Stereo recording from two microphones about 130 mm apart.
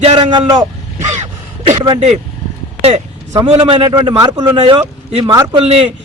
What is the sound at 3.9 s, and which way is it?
Speech, 35° right (ahead or behind).